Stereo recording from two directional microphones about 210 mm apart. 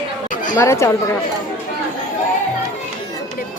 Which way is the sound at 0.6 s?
15° left (ahead or behind).